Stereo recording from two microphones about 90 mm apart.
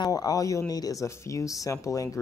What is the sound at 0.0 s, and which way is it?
Speech, 45° left (ahead or behind).